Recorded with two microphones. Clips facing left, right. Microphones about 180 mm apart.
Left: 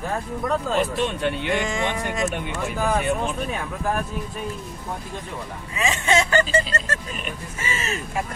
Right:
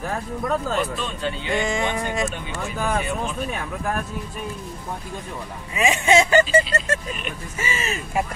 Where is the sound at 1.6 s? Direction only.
Centre (ahead or behind).